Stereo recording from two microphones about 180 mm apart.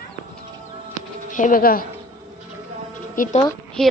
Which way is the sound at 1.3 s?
50° left (ahead or behind).